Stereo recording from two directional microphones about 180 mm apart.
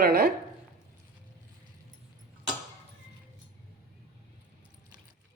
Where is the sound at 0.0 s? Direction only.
55° right (ahead or behind).